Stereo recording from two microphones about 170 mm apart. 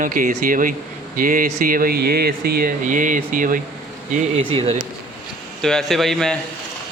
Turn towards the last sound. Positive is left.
turn(degrees=5)  # may be behind; listen again after turning